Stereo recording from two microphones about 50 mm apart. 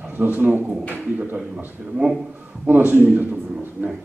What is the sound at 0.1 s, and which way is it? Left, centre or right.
A man's voice, right.